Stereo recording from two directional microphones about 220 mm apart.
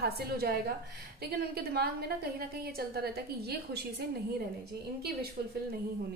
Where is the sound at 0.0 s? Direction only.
45° right (ahead or behind).